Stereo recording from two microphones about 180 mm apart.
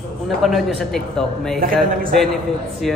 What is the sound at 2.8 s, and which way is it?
Speech, centre (ahead or behind).